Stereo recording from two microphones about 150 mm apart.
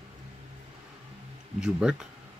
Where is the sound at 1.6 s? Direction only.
5° right (ahead or behind).